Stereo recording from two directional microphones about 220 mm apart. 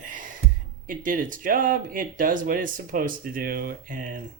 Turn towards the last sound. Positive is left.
turn(degrees=-40)  # may be behind; listen again after turning